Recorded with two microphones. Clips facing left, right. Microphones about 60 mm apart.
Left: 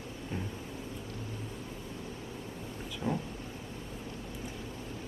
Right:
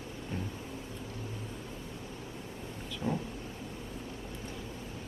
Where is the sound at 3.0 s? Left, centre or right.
Left.